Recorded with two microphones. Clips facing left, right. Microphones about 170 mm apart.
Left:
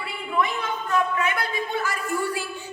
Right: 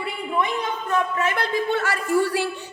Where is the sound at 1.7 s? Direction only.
75° right (ahead or behind).